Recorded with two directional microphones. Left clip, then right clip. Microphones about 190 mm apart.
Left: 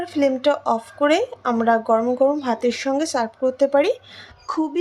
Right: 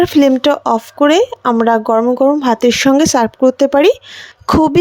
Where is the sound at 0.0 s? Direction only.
45° right (ahead or behind).